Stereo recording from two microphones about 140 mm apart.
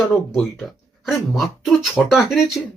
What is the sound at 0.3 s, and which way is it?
Speech, centre (ahead or behind).